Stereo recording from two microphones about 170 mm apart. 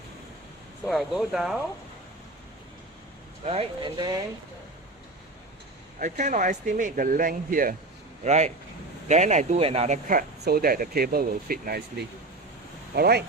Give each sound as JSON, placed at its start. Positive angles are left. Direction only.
{"t": 0.9, "sound": "speech", "side_deg": 0}
{"t": 3.4, "sound": "speech", "side_deg": -35}
{"t": 6.0, "sound": "speech", "side_deg": -45}
{"t": 8.2, "sound": "speech", "side_deg": -45}
{"t": 10.4, "sound": "speech", "side_deg": -65}